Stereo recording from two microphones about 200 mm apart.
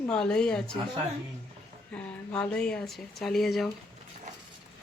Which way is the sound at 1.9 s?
5° left (ahead or behind).